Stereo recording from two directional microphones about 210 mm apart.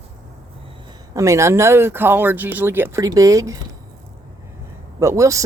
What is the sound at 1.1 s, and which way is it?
Speech, 15° right (ahead or behind).